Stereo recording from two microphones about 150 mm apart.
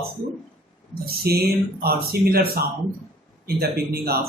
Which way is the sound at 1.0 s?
90° right.